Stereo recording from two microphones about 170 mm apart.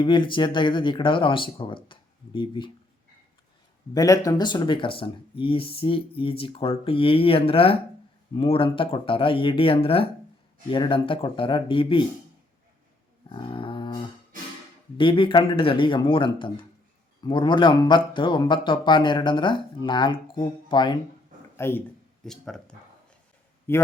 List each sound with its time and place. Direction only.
0.0 s speech: 30° left (ahead or behind)
3.9 s speech: 20° left (ahead or behind)
13.3 s dog: 30° left (ahead or behind)
14.9 s speech: 30° left (ahead or behind)
21.5 s speech: 15° left (ahead or behind)
22.2 s speech: 5° left (ahead or behind)
23.7 s a man's voice: 15° left (ahead or behind)